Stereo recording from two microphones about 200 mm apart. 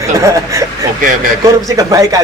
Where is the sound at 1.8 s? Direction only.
15° right (ahead or behind).